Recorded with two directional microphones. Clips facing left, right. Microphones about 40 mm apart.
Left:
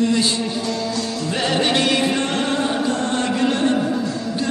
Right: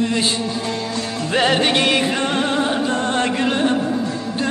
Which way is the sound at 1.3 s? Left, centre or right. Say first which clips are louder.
Right 4 dB; right.